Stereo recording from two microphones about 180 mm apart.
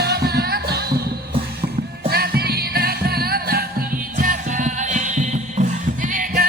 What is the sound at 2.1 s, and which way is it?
Music, 60° right (ahead or behind).